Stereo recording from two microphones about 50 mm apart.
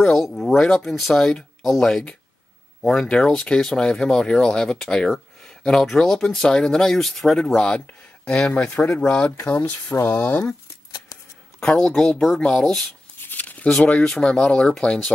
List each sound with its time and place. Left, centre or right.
0.0 s speech: centre
2.8 s speech: centre
8.8 s speech: left
9.8 s speech: left
10.1 s speech: left
11.6 s speech: centre
13.2 s a sound: left
14.0 s speech: centre
14.4 s speech: left